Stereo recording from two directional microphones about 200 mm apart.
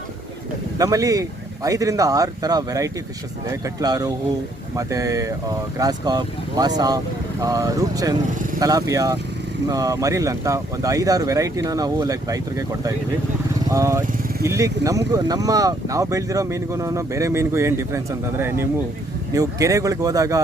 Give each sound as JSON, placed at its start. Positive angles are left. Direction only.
{"t": 0.8, "sound": "speech", "side_deg": -15}